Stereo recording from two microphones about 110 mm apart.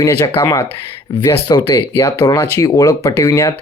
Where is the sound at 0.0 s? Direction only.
30° left (ahead or behind).